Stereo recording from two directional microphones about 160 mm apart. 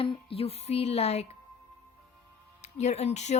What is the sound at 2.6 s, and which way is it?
Speech, 45° left (ahead or behind).